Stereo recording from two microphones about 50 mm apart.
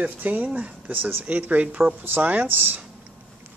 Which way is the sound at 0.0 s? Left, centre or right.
Right.